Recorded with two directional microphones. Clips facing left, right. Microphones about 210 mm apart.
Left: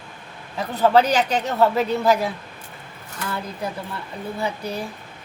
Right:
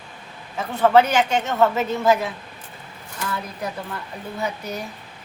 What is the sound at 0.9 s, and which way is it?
A woman's voice, 35° left (ahead or behind).